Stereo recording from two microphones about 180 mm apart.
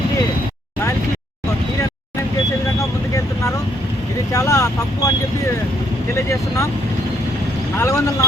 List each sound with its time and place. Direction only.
4.3 s speech: 20° left (ahead or behind)
7.8 s speech: 15° left (ahead or behind)